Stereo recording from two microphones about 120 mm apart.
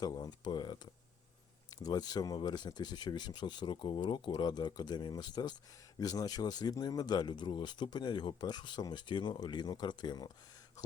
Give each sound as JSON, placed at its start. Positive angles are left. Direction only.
{"t": 0.0, "sound": "speech", "side_deg": 35}